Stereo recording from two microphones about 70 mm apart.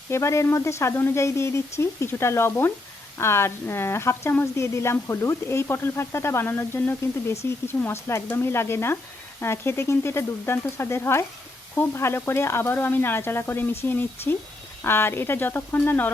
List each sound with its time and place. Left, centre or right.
0.1 s a woman's voice: left